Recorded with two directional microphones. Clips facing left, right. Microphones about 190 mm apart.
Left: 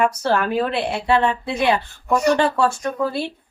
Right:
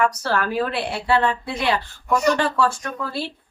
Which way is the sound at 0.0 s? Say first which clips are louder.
Left 3 dB; 20° left (ahead or behind).